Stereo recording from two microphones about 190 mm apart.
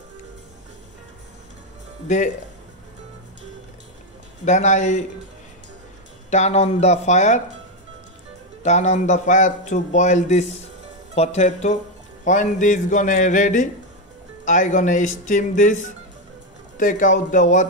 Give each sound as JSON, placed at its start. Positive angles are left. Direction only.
{"t": 2.0, "sound": "a man's voice", "side_deg": 40}
{"t": 4.5, "sound": "a man's voice", "side_deg": 40}
{"t": 6.3, "sound": "a man's voice", "side_deg": 35}
{"t": 8.6, "sound": "a man's voice", "side_deg": 40}